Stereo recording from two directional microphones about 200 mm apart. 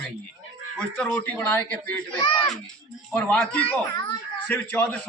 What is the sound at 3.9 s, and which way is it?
Speech, 20° left (ahead or behind).